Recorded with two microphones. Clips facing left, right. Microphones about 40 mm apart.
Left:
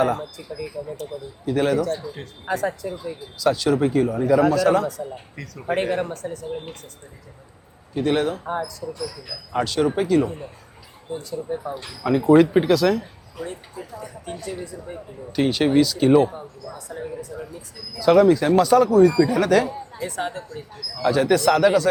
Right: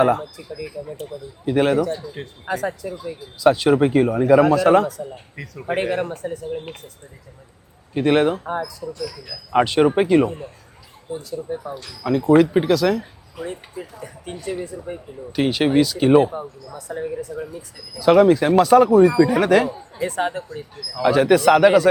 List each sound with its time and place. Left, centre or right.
0.0 s a man's voice: right
0.3 s speech: centre
1.5 s a man's voice: right
2.0 s speech: centre
2.5 s speech: centre
3.3 s a man's voice: right
5.4 s speech: centre
7.9 s a man's voice: right
8.4 s speech: centre
8.8 s speech: centre
9.5 s speech: right
11.1 s a man's voice: centre; by 20.4 s right
20.9 s a man's voice: centre